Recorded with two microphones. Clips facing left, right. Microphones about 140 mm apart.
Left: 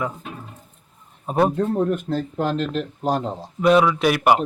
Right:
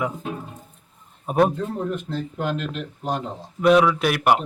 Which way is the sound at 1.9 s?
45° left (ahead or behind).